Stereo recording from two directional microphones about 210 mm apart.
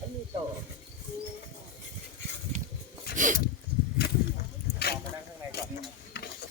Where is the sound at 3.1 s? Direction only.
40° right (ahead or behind).